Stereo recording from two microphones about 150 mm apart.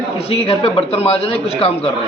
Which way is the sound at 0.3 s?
40° left (ahead or behind).